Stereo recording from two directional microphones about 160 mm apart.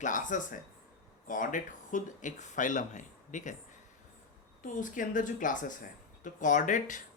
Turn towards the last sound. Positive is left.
turn(degrees=50)  # may be behind; listen again after turning